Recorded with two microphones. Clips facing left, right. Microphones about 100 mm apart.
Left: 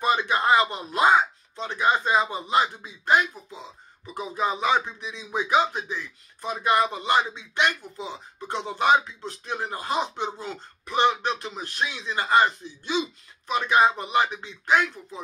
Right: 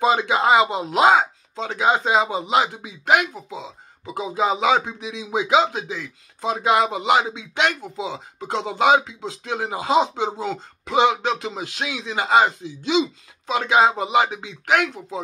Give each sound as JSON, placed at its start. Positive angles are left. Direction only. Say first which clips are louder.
{"t": 0.0, "sound": "speech", "louder": "right 4 dB", "side_deg": -90}